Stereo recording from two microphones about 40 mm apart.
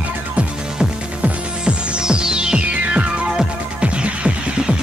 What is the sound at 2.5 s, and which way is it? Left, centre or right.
Music, right.